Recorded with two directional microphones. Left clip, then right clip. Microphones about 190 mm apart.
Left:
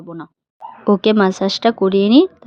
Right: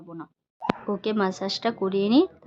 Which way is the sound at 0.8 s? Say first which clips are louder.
Left 15 dB; 40° left (ahead or behind).